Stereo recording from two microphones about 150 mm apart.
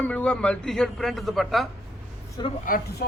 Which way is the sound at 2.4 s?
30° left (ahead or behind).